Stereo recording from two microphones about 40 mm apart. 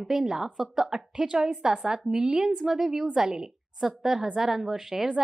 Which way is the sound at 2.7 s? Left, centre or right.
Centre.